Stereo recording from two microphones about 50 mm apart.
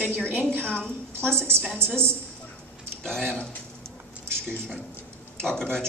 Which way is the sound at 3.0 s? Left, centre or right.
Centre.